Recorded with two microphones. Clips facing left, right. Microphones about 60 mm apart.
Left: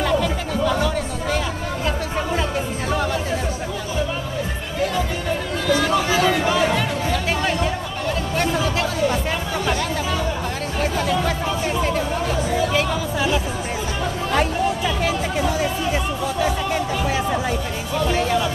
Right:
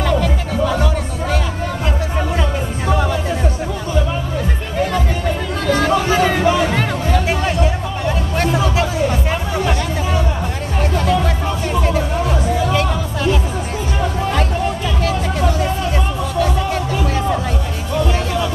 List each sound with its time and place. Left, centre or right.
0.0 s music: centre
5.7 s a sound: right
8.1 s music: centre
10.8 s music: centre
12.7 s music: centre
15.9 s music: centre